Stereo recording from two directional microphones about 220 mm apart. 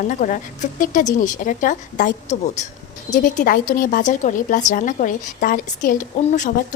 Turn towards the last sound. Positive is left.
turn(degrees=35)  # may be behind; listen again after turning